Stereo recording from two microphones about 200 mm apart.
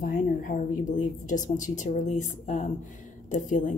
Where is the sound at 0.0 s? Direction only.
45° left (ahead or behind).